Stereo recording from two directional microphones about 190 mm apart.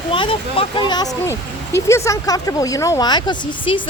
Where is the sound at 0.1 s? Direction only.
25° left (ahead or behind).